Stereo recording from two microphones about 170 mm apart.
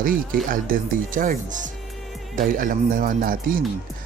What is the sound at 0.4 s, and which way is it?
Speech, 55° right (ahead or behind).